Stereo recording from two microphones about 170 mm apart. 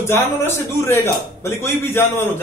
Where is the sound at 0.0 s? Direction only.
15° left (ahead or behind).